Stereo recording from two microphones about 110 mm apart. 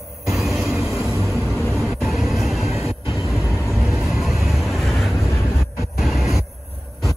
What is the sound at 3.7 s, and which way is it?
Vehicle, 5° right (ahead or behind).